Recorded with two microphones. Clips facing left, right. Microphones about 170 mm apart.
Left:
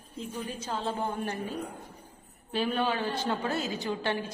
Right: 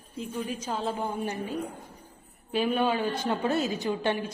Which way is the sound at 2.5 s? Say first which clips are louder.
Right 3 dB; 10° right (ahead or behind).